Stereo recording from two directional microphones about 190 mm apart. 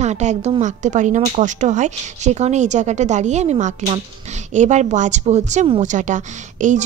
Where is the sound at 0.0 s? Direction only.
35° right (ahead or behind).